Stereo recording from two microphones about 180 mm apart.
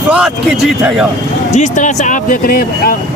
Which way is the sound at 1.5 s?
40° left (ahead or behind).